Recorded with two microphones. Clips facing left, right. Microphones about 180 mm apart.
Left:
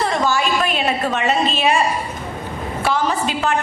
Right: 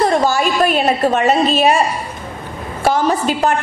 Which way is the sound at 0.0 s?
40° right (ahead or behind).